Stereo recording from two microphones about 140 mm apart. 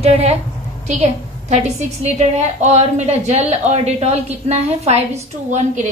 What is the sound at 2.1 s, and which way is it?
Speech, 55° right (ahead or behind).